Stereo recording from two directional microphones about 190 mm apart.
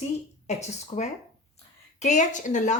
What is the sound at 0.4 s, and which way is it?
Speech, 35° left (ahead or behind).